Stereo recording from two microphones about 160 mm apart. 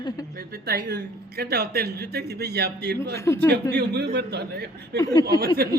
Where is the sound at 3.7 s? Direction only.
90° right.